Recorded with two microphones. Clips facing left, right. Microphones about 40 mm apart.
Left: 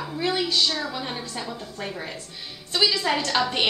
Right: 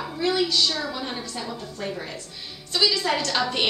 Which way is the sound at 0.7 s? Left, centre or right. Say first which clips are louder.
Even; centre.